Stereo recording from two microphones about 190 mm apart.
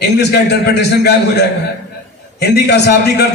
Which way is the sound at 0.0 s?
60° left (ahead or behind).